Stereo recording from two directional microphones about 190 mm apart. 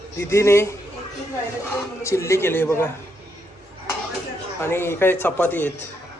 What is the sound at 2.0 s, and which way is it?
Speech, 15° left (ahead or behind).